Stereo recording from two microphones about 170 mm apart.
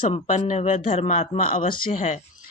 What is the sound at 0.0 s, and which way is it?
Speech, 40° left (ahead or behind).